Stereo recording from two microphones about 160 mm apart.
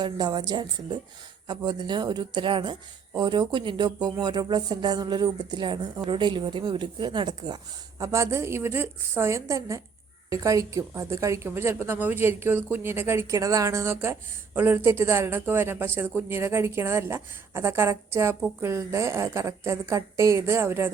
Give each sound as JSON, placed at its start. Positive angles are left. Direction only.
{"t": 0.0, "sound": "a woman's voice", "side_deg": -25}